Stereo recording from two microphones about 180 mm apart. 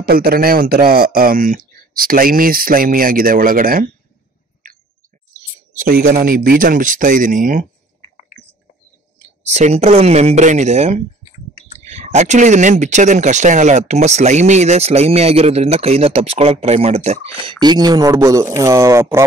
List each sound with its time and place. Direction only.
0.0 s speech: 55° right (ahead or behind)
4.6 s a sound: 50° right (ahead or behind)
5.7 s speech: 50° right (ahead or behind)
9.4 s speech: 40° right (ahead or behind)
17.5 s speech: 25° right (ahead or behind)